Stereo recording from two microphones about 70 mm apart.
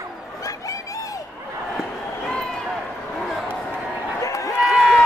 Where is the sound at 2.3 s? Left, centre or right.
Centre.